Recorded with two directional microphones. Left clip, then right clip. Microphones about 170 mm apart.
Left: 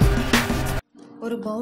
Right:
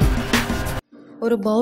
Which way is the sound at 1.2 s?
35° right (ahead or behind).